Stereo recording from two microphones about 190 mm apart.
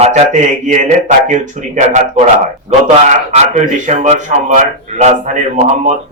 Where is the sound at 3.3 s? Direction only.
40° right (ahead or behind).